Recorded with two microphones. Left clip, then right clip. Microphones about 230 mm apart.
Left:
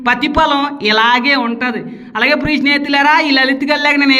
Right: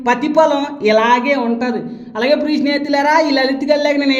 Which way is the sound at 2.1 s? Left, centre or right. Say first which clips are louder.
Left 2 dB; left.